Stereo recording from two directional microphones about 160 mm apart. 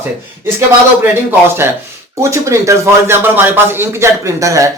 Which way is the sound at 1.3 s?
15° right (ahead or behind).